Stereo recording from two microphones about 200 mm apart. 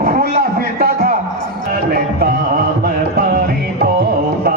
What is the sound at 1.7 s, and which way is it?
Music, 50° right (ahead or behind).